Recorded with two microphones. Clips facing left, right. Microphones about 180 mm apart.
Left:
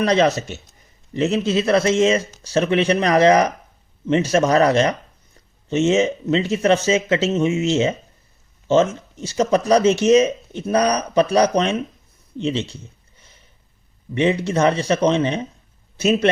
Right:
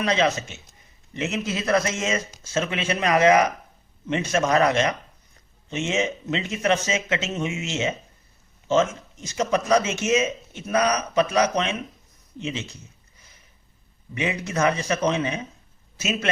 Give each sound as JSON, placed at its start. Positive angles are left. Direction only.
{"t": 0.0, "sound": "speech", "side_deg": 35}
{"t": 12.4, "sound": "a sound", "side_deg": 30}
{"t": 14.2, "sound": "speech", "side_deg": 30}